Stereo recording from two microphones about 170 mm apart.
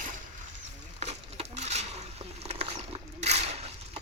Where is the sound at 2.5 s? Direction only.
35° right (ahead or behind).